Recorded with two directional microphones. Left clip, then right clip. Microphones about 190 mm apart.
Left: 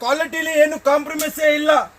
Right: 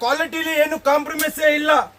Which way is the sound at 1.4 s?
10° right (ahead or behind).